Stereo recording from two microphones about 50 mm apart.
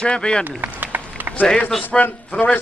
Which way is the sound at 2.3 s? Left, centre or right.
Left.